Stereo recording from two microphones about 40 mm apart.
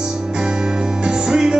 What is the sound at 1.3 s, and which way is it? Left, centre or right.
Music, centre.